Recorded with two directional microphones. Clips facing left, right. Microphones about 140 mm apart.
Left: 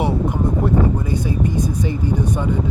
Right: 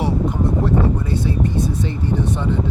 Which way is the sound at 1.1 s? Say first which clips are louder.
Even; 15° left (ahead or behind).